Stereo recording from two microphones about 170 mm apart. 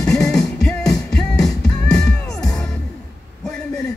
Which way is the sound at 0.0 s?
5° left (ahead or behind).